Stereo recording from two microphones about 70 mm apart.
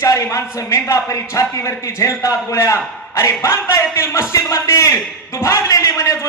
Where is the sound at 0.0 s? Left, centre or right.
Left.